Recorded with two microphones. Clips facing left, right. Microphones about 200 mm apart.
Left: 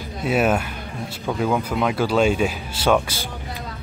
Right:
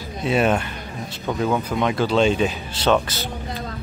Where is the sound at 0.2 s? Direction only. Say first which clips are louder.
Even; 5° left (ahead or behind).